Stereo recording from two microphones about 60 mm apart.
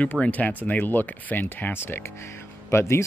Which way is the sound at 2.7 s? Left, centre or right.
Left.